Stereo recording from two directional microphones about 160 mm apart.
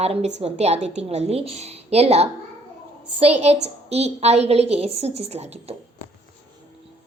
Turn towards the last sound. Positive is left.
turn(degrees=-40)  # may be behind; listen again after turning